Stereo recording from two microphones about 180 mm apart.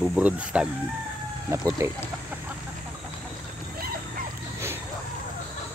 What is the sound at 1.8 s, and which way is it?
Speech, 15° right (ahead or behind).